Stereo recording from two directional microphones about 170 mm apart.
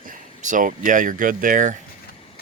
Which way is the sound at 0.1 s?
50° right (ahead or behind).